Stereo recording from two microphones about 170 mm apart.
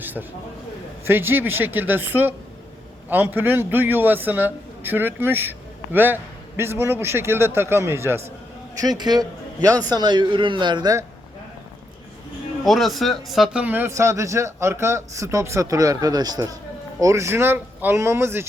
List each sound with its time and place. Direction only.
0.0 s a sound: 10° right (ahead or behind)
1.0 s a man's voice: 10° right (ahead or behind)
12.6 s speech: centre (ahead or behind); by 18.4 s 15° right (ahead or behind)